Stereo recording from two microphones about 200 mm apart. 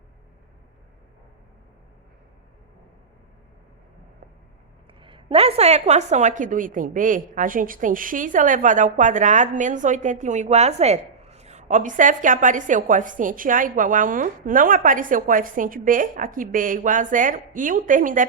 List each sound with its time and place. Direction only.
4.9 s a woman's voice: 25° right (ahead or behind); by 18.3 s 40° right (ahead or behind)